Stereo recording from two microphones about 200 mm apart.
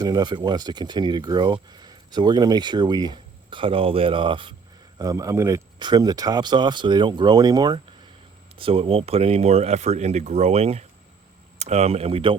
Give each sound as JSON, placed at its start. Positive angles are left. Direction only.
{"t": 0.0, "sound": "speech", "side_deg": -20}